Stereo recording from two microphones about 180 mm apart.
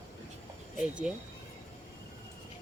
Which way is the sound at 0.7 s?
5° right (ahead or behind).